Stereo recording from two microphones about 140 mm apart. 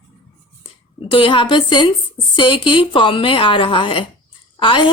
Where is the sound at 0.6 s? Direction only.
35° left (ahead or behind).